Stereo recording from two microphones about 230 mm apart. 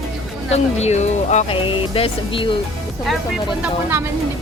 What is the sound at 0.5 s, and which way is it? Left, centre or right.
Speech, left.